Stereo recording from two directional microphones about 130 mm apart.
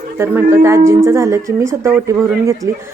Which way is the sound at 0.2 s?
20° right (ahead or behind).